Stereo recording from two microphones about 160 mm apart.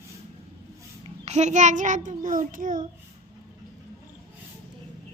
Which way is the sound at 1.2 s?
45° right (ahead or behind).